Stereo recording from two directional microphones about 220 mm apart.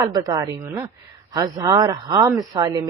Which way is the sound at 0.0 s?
15° right (ahead or behind).